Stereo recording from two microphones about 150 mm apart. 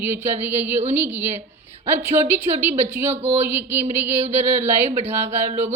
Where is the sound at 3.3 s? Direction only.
15° right (ahead or behind).